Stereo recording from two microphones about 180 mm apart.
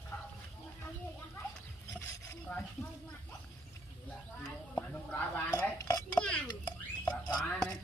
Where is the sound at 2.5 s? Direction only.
10° left (ahead or behind).